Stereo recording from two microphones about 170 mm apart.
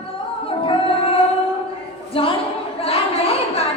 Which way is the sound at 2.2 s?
30° left (ahead or behind).